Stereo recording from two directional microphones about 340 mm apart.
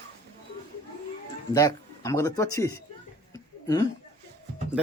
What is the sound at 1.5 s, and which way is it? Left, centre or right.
Speech, centre.